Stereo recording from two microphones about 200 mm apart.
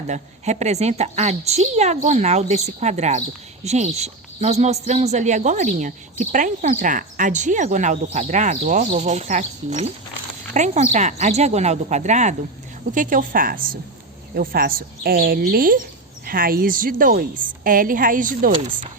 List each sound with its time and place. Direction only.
0.1 s a woman's voice: 35° right (ahead or behind)